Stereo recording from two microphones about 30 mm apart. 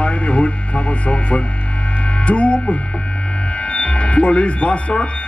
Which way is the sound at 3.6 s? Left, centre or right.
Left.